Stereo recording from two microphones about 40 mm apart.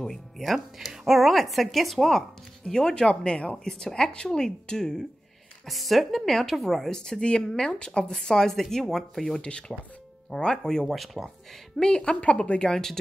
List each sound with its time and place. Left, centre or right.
0.5 s speech: centre
2.6 s speech: centre
5.7 s speech: centre
6.9 s a woman's voice: centre
9.2 s a woman's voice: left
11.2 s speech: centre
11.8 s speech: left
12.5 s a woman's voice: centre